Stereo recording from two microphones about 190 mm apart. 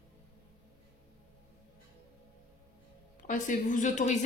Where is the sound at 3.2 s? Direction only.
45° left (ahead or behind).